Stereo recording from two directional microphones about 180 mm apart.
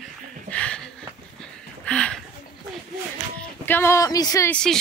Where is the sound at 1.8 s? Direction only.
5° left (ahead or behind).